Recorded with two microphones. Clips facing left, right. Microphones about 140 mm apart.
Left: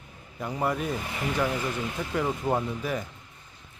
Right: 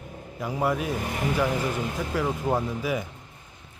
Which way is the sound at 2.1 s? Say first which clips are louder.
Right 1 dB; centre (ahead or behind).